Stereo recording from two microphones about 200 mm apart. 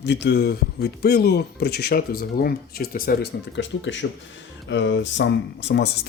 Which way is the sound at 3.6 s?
65° left (ahead or behind).